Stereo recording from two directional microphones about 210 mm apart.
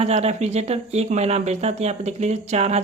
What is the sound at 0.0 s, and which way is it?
Speech, 30° right (ahead or behind).